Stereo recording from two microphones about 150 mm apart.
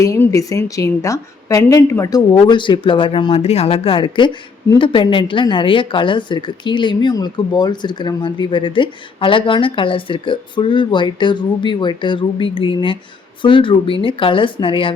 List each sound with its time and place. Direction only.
0.0 s a woman's voice: 20° left (ahead or behind); by 14.9 s 35° left (ahead or behind)